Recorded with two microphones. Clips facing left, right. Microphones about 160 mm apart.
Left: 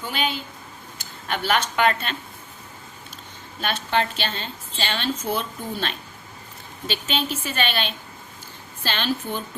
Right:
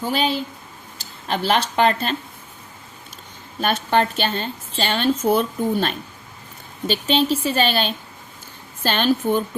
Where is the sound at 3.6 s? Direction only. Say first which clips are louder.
Right 5 dB; 45° right (ahead or behind).